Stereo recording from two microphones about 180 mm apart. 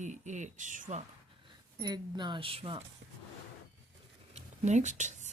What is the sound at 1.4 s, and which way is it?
Speech, 25° right (ahead or behind).